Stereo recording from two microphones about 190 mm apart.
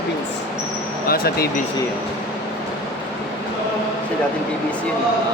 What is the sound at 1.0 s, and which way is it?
Speech, 50° left (ahead or behind).